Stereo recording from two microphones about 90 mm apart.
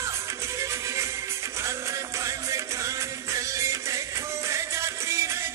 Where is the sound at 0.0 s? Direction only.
30° right (ahead or behind).